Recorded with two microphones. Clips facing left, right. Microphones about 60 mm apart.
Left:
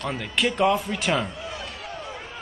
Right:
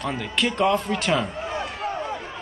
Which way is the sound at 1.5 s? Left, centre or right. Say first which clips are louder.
Right 6 dB; right.